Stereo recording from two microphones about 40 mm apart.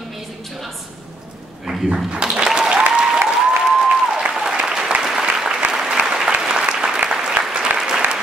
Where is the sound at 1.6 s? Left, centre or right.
Centre.